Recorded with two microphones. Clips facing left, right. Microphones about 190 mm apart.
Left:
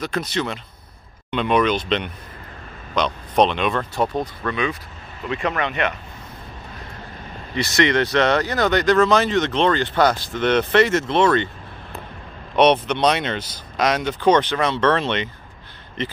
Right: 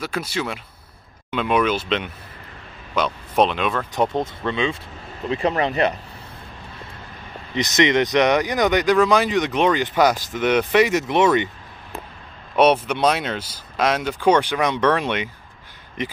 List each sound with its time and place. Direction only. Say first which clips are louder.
0.0 s speech: left 2 dB; 10° right (ahead or behind)
3.9 s speech: right 1 dB; 20° right (ahead or behind)
7.5 s speech: right 1 dB; 20° right (ahead or behind)
12.5 s speech: even; 5° right (ahead or behind)